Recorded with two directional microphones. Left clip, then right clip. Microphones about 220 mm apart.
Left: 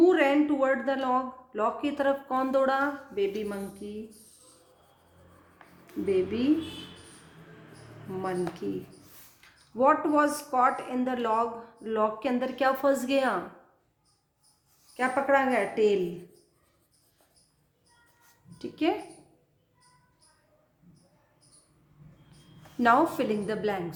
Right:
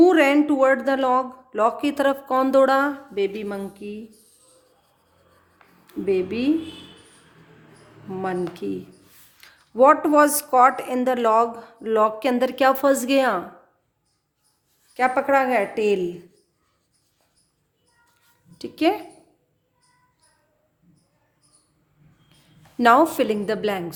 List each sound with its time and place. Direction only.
0.0 s speech: 50° right (ahead or behind)
8.2 s a woman's voice: 50° right (ahead or behind)
14.9 s a woman's voice: 50° right (ahead or behind)
18.5 s speech: 50° right (ahead or behind)
22.8 s a woman's voice: 45° right (ahead or behind)